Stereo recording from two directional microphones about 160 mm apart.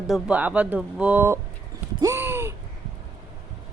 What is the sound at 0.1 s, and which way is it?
Speech, 10° right (ahead or behind).